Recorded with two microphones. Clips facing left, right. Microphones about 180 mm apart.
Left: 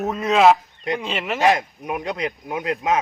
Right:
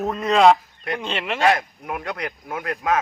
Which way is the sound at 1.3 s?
20° left (ahead or behind).